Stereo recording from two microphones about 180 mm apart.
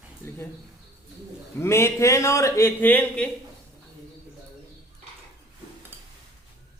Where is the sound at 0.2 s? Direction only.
15° left (ahead or behind).